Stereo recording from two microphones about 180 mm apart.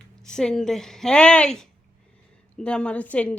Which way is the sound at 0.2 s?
5° left (ahead or behind).